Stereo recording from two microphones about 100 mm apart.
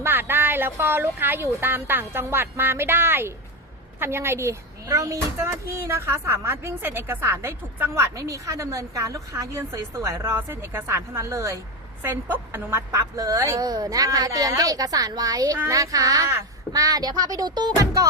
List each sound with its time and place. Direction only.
0.0 s a woman's voice: 20° right (ahead or behind); by 17.7 s 45° right (ahead or behind)